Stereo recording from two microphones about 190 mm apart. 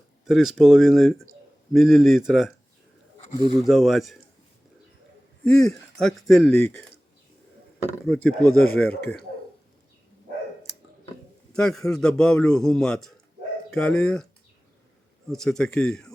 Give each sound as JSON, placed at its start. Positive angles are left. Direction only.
{"t": 0.3, "sound": "a man's voice", "side_deg": 0}
{"t": 3.6, "sound": "a man's voice", "side_deg": 0}
{"t": 5.5, "sound": "a man's voice", "side_deg": 5}
{"t": 6.5, "sound": "speech", "side_deg": 10}
{"t": 8.0, "sound": "a man's voice", "side_deg": 0}
{"t": 8.9, "sound": "speech", "side_deg": 60}
{"t": 11.5, "sound": "a man's voice", "side_deg": 5}
{"t": 15.3, "sound": "a man's voice", "side_deg": 5}